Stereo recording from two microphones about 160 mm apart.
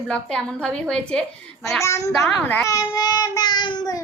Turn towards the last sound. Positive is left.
turn(degrees=25)  # may be behind; listen again after turning